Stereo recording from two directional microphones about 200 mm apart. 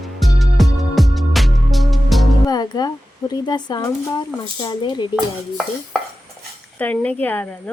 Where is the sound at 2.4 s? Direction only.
20° left (ahead or behind).